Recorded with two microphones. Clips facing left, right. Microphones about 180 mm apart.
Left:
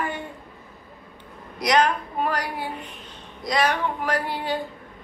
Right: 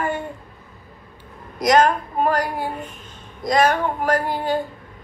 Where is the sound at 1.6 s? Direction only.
45° right (ahead or behind).